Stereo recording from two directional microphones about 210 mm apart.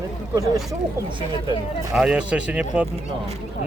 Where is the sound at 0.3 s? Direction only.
15° right (ahead or behind).